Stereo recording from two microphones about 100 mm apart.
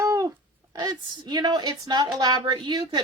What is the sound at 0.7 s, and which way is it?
A woman's voice, 45° right (ahead or behind).